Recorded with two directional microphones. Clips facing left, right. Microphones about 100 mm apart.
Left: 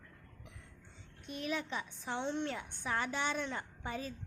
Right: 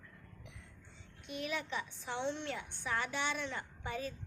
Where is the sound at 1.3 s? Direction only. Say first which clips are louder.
Left 1 dB; 35° left (ahead or behind).